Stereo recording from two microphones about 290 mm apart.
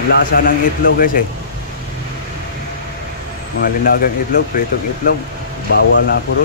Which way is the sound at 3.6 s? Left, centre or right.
Left.